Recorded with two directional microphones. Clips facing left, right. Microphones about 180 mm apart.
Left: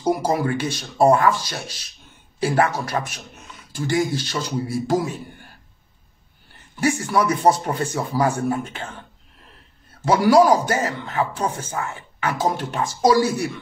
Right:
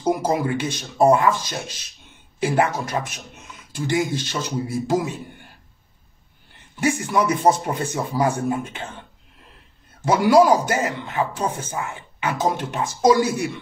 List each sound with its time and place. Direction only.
0.3 s speech: 20° right (ahead or behind)
6.8 s speech: 20° right (ahead or behind)
10.0 s speech: 20° right (ahead or behind)